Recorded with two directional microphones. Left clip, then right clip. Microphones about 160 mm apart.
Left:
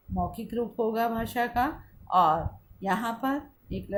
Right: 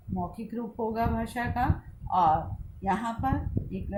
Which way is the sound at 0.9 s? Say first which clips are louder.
Left 2 dB; 60° left (ahead or behind).